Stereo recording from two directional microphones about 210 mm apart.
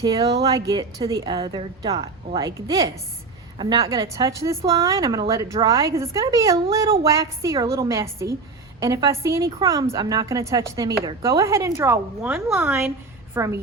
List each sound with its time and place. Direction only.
0.0 s a woman's voice: 20° right (ahead or behind)